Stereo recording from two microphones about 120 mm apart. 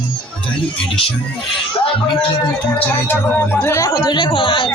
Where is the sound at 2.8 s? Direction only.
20° left (ahead or behind); by 4.7 s 45° left (ahead or behind).